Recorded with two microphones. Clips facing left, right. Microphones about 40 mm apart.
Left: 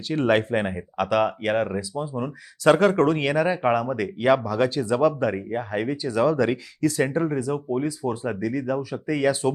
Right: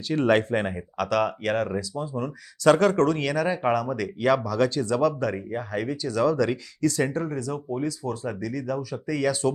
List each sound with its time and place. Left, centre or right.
0.1 s speech: centre